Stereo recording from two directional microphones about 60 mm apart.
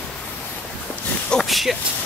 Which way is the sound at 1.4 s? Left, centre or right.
Centre.